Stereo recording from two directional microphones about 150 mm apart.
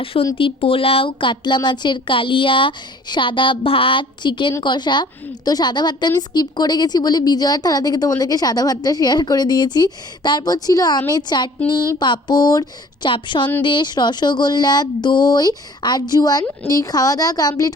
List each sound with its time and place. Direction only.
0.0 s a woman's voice: 40° left (ahead or behind)